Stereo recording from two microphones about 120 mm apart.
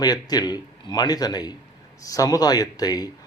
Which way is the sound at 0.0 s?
35° left (ahead or behind).